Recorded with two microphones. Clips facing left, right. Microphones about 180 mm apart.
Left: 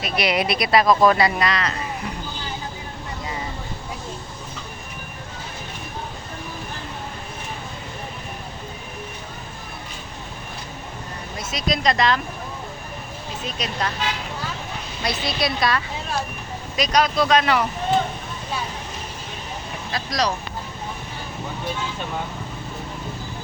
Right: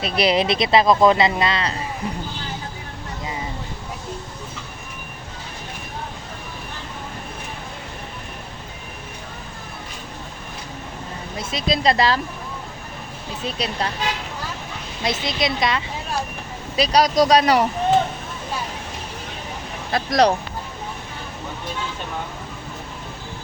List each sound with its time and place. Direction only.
0.0 s speech: 30° right (ahead or behind)
11.3 s speech: 25° right (ahead or behind)
13.6 s speech: 30° right (ahead or behind)
15.0 s speech: 20° right (ahead or behind)
16.7 s speech: 30° right (ahead or behind)
19.9 s speech: 55° right (ahead or behind)